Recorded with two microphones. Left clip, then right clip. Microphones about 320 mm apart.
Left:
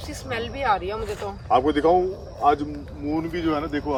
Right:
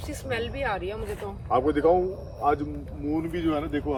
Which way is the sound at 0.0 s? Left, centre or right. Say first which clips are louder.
Left 1 dB; centre.